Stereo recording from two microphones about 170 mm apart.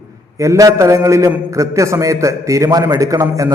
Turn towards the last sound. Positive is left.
turn(degrees=-20)  # may be behind; listen again after turning